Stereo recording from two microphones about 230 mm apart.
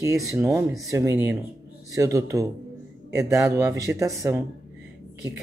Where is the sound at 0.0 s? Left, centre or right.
Centre.